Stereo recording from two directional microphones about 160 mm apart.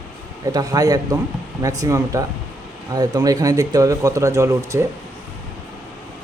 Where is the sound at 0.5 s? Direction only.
25° right (ahead or behind).